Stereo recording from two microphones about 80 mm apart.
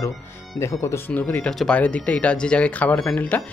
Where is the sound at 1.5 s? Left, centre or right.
Centre.